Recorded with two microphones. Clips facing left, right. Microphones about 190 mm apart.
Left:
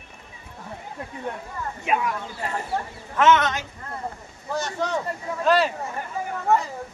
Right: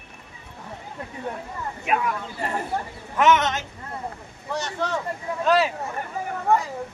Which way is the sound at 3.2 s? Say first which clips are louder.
Left 1 dB; 15° right (ahead or behind).